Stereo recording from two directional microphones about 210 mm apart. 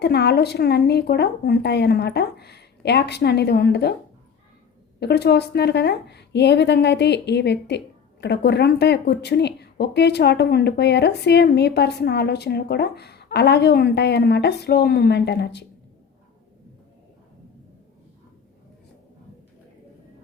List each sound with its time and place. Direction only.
0.0 s speech: 50° left (ahead or behind)
4.9 s speech: 50° left (ahead or behind)